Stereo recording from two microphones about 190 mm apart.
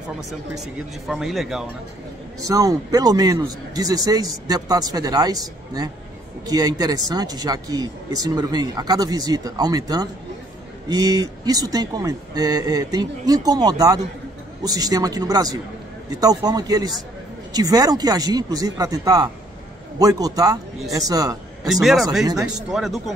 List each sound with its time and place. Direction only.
1.0 s speech: centre (ahead or behind)
2.4 s speech: 20° right (ahead or behind)
21.6 s speech: centre (ahead or behind)